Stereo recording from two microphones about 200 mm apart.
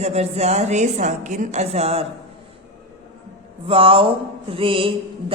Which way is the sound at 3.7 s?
25° right (ahead or behind).